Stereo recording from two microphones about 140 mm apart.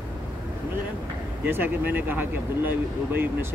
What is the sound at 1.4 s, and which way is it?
Speech, 15° right (ahead or behind).